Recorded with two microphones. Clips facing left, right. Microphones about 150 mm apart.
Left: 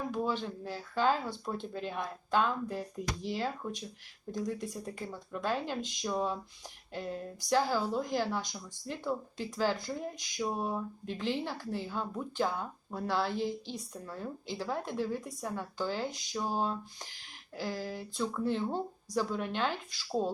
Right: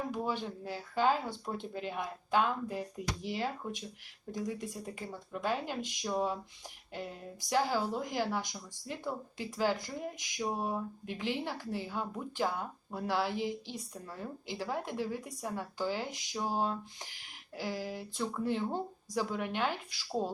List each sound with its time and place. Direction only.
0.1 s speech: 10° right (ahead or behind)
4.9 s speech: 10° right (ahead or behind)
7.5 s speech: 15° right (ahead or behind)